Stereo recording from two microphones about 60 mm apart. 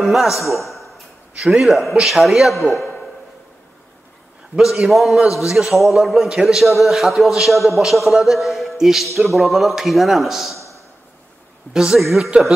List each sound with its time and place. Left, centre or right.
0.0 s a man's voice: centre
1.3 s a man's voice: centre
1.6 s a man's voice: centre
4.6 s a man's voice: centre
11.7 s a woman's voice: centre